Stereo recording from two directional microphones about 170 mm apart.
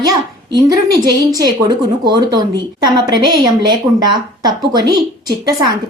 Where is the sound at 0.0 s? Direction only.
20° right (ahead or behind).